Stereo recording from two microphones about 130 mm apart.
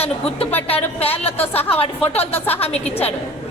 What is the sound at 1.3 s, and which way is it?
Speech, 15° left (ahead or behind).